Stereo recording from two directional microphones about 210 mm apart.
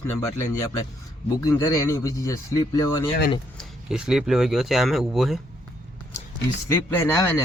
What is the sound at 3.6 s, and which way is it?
Speech, 5° right (ahead or behind).